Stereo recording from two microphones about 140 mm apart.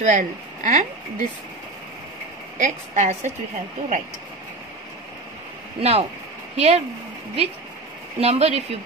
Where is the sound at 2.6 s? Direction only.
60° right (ahead or behind).